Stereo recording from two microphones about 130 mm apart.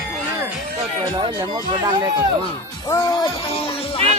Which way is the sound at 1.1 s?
40° right (ahead or behind).